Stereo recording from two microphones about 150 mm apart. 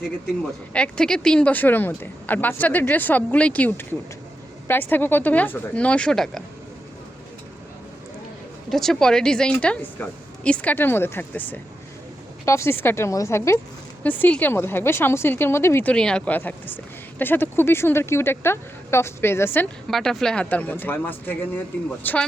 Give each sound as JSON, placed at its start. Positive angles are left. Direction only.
{"t": 0.7, "sound": "speech", "side_deg": 5}
{"t": 8.7, "sound": "a woman's voice", "side_deg": 5}
{"t": 19.9, "sound": "speech", "side_deg": 0}